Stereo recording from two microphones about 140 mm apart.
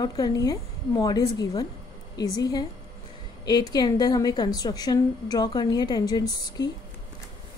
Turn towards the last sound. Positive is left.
turn(degrees=30)  # may be behind; listen again after turning